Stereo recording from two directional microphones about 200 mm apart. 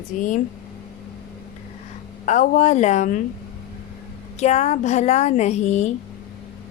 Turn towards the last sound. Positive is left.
turn(degrees=35)  # may be behind; listen again after turning